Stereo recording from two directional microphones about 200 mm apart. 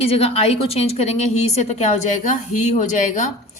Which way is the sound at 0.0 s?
30° left (ahead or behind).